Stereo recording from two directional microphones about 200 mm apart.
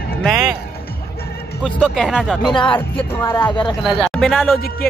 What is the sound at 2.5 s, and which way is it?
Speech, 25° left (ahead or behind).